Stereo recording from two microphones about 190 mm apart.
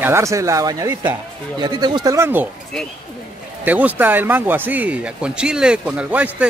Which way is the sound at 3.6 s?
10° right (ahead or behind).